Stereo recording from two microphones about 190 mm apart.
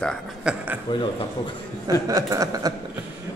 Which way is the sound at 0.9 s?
25° left (ahead or behind).